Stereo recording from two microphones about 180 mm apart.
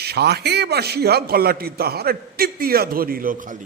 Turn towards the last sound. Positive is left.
turn(degrees=-45)  # may be behind; listen again after turning